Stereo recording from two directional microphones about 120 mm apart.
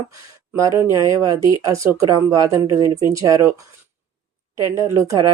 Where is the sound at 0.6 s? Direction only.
25° right (ahead or behind).